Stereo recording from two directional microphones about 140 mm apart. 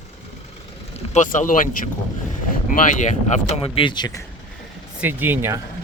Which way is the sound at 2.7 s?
60° left (ahead or behind).